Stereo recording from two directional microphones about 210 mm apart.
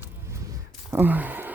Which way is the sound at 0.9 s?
10° right (ahead or behind).